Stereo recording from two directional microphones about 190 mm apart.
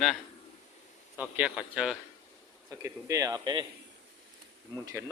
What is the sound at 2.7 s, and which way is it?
Speech, 15° right (ahead or behind).